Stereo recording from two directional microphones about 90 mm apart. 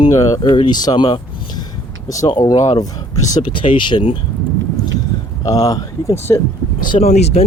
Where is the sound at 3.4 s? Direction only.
70° left (ahead or behind).